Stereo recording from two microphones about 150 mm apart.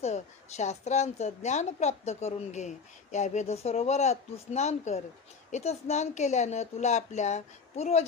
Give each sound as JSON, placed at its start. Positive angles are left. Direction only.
{"t": 0.0, "sound": "a woman's voice", "side_deg": 50}